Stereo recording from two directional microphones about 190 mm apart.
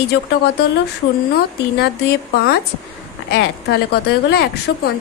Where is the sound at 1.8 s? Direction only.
60° left (ahead or behind).